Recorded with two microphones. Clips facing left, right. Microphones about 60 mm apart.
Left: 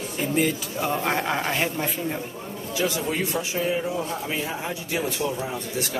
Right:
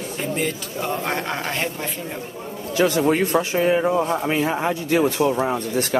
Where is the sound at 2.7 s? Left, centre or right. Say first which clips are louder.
Right 8 dB; right.